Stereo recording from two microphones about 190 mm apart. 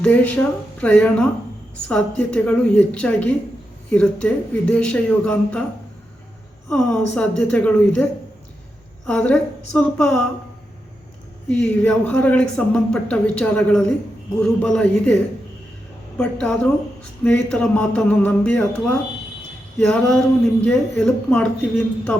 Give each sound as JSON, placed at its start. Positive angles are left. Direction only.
{"t": 0.0, "sound": "a woman's voice", "side_deg": 10}
{"t": 6.7, "sound": "a man's voice", "side_deg": 5}
{"t": 9.0, "sound": "a man's voice", "side_deg": 5}
{"t": 11.4, "sound": "a man's voice", "side_deg": 5}